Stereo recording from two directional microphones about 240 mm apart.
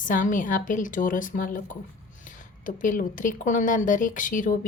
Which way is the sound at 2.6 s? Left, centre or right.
Left.